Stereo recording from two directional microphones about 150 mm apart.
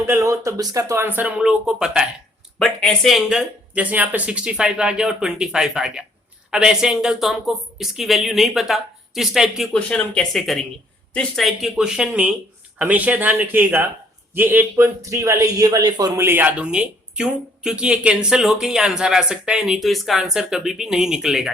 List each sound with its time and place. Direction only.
0.0 s a man's voice: 20° right (ahead or behind); by 21.5 s centre (ahead or behind)